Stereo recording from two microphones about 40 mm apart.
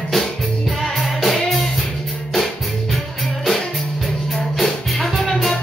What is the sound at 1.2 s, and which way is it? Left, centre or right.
Music, centre.